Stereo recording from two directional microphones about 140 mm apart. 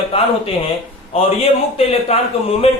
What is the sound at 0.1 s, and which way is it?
A man's voice, 40° left (ahead or behind).